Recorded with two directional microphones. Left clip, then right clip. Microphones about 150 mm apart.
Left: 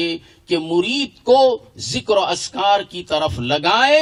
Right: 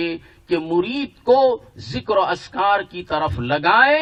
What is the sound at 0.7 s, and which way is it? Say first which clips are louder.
A man's voice: left 2 dB; 55° left (ahead or behind).